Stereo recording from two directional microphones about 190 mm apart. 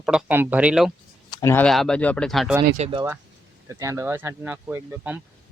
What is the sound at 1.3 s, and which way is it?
Speech, 10° left (ahead or behind).